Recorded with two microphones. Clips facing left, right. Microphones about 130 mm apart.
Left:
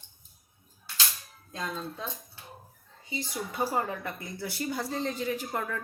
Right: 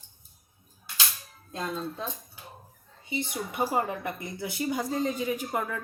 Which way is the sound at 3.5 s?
15° right (ahead or behind).